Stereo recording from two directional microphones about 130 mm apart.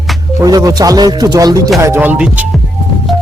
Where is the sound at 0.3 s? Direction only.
25° right (ahead or behind).